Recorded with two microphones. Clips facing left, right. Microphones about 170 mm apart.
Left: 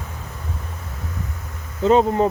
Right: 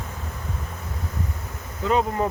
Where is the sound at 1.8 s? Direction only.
25° left (ahead or behind).